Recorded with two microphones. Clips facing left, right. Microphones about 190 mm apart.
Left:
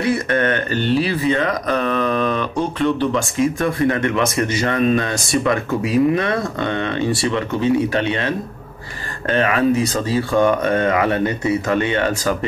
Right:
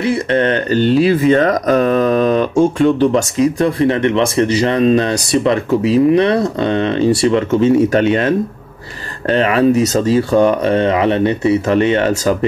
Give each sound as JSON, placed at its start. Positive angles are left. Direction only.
{"t": 0.0, "sound": "speech", "side_deg": -25}